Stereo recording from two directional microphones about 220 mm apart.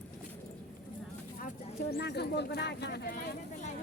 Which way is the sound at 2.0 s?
50° left (ahead or behind).